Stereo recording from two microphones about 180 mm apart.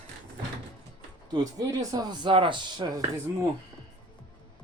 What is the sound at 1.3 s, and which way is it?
Speech, 20° right (ahead or behind).